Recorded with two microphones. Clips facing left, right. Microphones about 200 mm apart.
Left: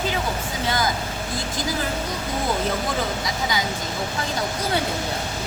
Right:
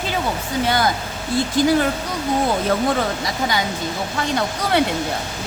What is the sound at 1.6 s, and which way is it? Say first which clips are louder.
Speech: right 12 dB; 65° right (ahead or behind).